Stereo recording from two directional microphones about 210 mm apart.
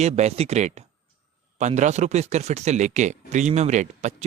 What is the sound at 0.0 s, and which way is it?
Speech, 30° right (ahead or behind).